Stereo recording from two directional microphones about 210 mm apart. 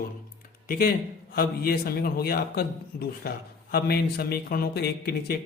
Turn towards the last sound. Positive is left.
turn(degrees=50)  # may be behind; listen again after turning